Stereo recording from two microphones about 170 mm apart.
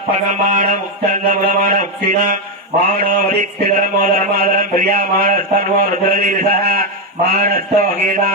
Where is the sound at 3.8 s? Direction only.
50° right (ahead or behind).